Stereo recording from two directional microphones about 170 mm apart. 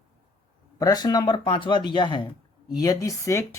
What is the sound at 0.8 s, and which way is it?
Speech, 20° left (ahead or behind).